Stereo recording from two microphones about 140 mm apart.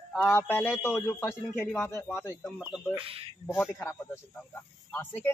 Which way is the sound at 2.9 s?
40° right (ahead or behind).